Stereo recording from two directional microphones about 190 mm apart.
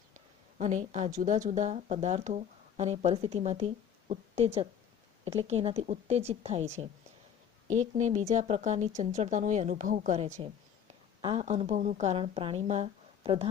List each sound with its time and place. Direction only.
0.6 s a woman's voice: 40° right (ahead or behind)